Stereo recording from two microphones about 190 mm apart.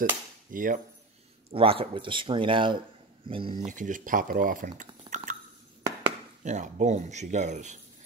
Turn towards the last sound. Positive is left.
turn(degrees=-40)  # may be behind; listen again after turning